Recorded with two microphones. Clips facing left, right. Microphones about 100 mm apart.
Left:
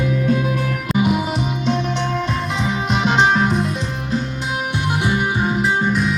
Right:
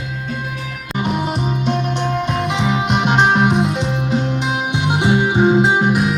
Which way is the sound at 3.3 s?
70° right (ahead or behind).